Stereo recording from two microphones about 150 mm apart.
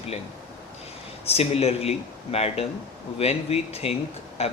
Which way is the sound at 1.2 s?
40° left (ahead or behind).